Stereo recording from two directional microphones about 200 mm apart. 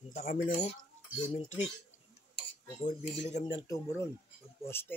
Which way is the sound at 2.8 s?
35° left (ahead or behind).